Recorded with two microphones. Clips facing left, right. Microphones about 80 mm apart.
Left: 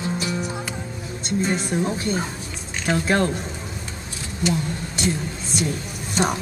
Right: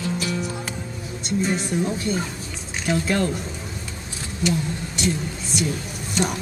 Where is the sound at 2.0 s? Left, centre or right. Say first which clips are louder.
Even; left.